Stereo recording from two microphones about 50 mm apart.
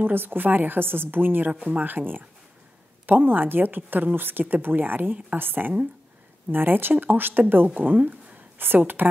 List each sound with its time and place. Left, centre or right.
0.0 s a woman's voice: right